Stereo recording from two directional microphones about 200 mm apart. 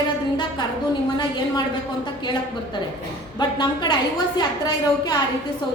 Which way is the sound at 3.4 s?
20° left (ahead or behind).